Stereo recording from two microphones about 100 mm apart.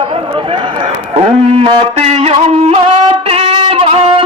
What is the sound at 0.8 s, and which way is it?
Speech, 70° right (ahead or behind).